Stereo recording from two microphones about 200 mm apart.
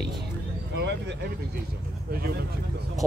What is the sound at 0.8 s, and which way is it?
Speech, 60° right (ahead or behind).